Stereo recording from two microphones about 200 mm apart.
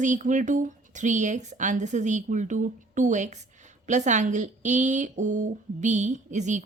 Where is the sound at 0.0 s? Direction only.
40° right (ahead or behind).